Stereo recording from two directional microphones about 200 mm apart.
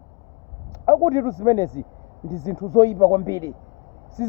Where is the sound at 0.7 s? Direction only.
20° right (ahead or behind).